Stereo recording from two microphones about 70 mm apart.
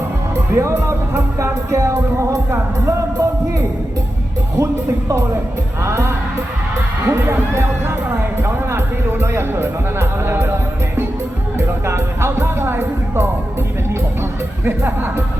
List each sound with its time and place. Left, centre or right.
0.5 s music: right
5.8 s music: right
7.0 s heart sounds: right
7.3 s music: right
11.5 s music: right